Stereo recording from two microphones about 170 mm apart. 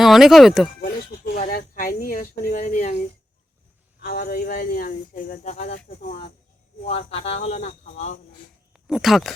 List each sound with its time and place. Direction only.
0.0 s speech: centre (ahead or behind)
0.8 s a sound: 70° left (ahead or behind)
1.4 s speech: 55° left (ahead or behind)
4.0 s speech: 65° left (ahead or behind); by 5.7 s 45° left (ahead or behind)
5.7 s speech: 60° left (ahead or behind)
6.8 s speech: 40° left (ahead or behind)
8.7 s speech: centre (ahead or behind)